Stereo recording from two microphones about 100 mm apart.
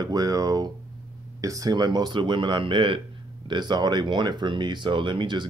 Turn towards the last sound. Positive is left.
turn(degrees=-50)  # may be behind; listen again after turning